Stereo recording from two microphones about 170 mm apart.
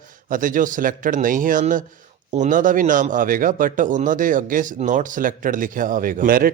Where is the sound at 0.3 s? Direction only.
50° right (ahead or behind).